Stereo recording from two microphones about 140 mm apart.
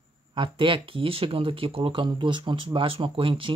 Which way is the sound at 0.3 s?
35° right (ahead or behind).